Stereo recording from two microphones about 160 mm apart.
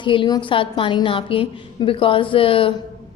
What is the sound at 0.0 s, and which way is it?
A woman's voice, 30° left (ahead or behind).